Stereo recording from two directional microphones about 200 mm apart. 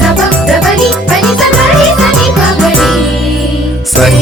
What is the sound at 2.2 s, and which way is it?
Music, centre (ahead or behind).